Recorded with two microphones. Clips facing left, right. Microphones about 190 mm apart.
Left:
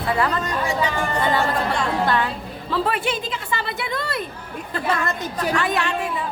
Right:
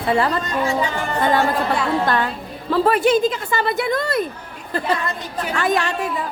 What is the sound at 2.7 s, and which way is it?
Speech, 40° right (ahead or behind).